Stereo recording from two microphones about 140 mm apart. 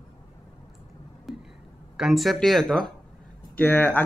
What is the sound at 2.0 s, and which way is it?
Speech, centre (ahead or behind).